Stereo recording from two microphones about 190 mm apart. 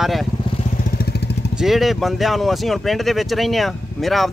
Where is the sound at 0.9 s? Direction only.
55° left (ahead or behind).